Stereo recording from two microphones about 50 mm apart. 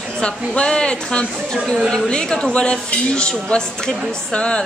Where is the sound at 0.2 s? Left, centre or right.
Centre.